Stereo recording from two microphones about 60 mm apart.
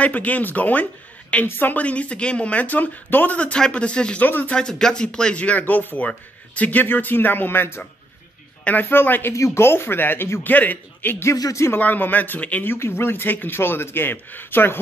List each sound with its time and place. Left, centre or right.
0.0 s speech: left
4.2 s speech: left
4.6 s a man's voice: centre; by 9.3 s left
9.3 s a man's voice: left
11.3 s speech: left
11.8 s speech: left
12.7 s a man's voice: left